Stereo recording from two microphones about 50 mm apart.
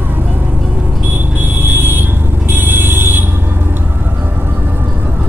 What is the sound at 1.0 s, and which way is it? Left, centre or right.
Smoke detector, right.